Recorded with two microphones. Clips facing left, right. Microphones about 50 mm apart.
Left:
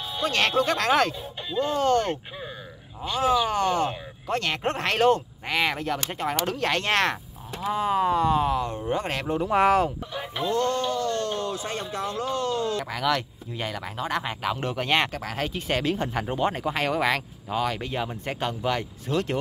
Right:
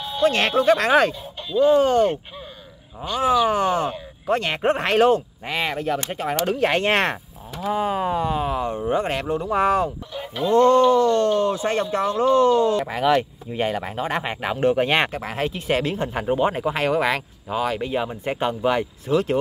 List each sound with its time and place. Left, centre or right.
0.0 s speech: centre
3.2 s speech: centre
7.7 s speech: centre
10.1 s speech: centre
10.5 s speech: right
15.5 s speech: centre